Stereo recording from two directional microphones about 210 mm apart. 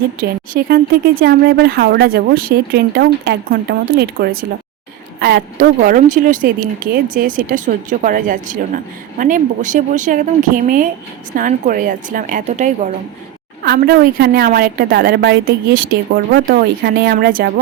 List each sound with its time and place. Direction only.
0.2 s speech: 45° right (ahead or behind)
13.6 s speech: 50° right (ahead or behind)